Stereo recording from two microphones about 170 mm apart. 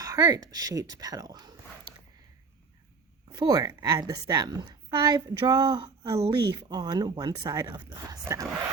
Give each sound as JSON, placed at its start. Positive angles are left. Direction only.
{"t": 0.0, "sound": "a woman's voice", "side_deg": -20}
{"t": 3.3, "sound": "a woman's voice", "side_deg": -20}